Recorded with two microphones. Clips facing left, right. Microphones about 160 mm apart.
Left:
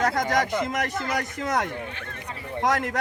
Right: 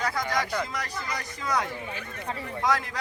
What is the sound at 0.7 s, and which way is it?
A man's voice, 50° left (ahead or behind).